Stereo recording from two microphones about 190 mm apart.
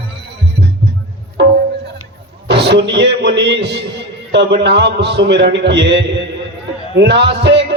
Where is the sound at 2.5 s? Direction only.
65° right (ahead or behind).